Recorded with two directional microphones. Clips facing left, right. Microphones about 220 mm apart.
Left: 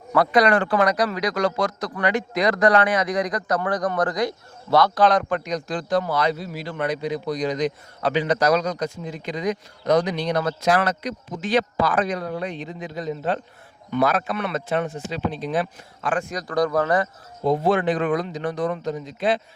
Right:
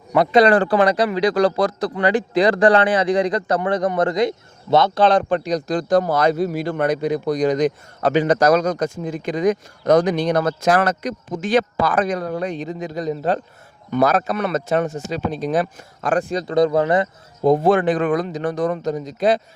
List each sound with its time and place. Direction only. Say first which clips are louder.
0.1 s speech: right 4 dB; 25° right (ahead or behind); by 16.2 s 45° right (ahead or behind)
16.3 s speech: right 5 dB; 25° right (ahead or behind)
17.4 s speech: right 5 dB; 50° right (ahead or behind)